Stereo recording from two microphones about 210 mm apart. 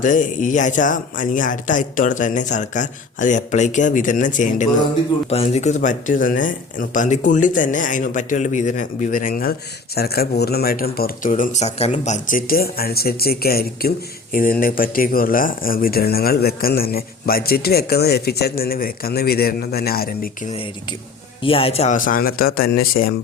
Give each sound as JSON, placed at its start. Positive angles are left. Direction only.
{"t": 0.0, "sound": "speech", "side_deg": 40}
{"t": 21.4, "sound": "speech", "side_deg": 25}